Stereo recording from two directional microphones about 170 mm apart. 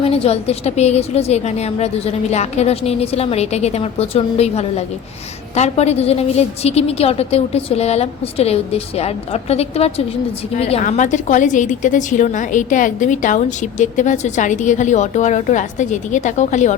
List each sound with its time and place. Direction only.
0.0 s a woman's voice: 35° left (ahead or behind)